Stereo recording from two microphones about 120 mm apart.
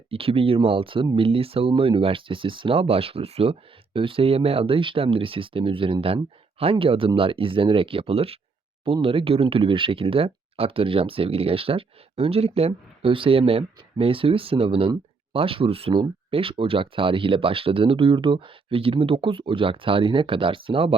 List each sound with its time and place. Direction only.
0.1 s speech: 50° right (ahead or behind)